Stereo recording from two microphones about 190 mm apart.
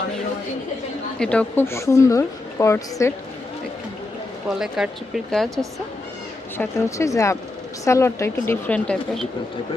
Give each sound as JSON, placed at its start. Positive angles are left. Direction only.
{"t": 1.2, "sound": "a woman's voice", "side_deg": 5}
{"t": 4.4, "sound": "speech", "side_deg": 0}
{"t": 6.6, "sound": "a woman's voice", "side_deg": 15}